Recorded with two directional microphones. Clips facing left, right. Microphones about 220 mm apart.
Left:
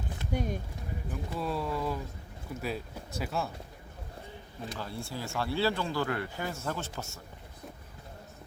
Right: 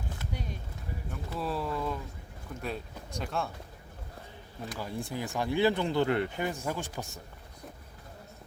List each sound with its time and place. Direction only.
0.3 s speech: 50° left (ahead or behind)
1.1 s speech: centre (ahead or behind)
4.8 s speech: 15° right (ahead or behind)